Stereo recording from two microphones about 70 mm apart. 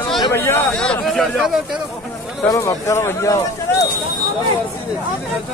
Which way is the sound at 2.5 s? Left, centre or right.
Left.